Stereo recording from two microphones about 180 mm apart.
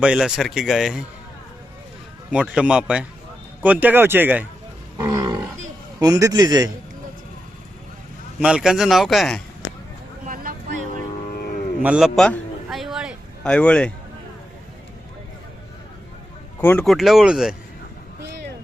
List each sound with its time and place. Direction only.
0.0 s a man's voice: 5° right (ahead or behind)
2.3 s a man's voice: 5° right (ahead or behind)
4.9 s a man's voice: 20° right (ahead or behind)
8.4 s a man's voice: 5° right (ahead or behind)
10.2 s vehicle: 50° right (ahead or behind)
11.3 s cattle: 50° left (ahead or behind)
11.8 s a sound: 5° right (ahead or behind)
13.5 s a man's voice: 5° left (ahead or behind)
16.6 s speech: 10° left (ahead or behind)
16.8 s a man's voice: centre (ahead or behind)